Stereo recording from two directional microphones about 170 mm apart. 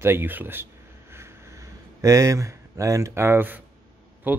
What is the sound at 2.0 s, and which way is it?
A man's voice, 20° right (ahead or behind).